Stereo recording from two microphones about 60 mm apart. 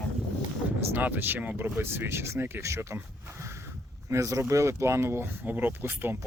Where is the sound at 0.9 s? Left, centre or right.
Right.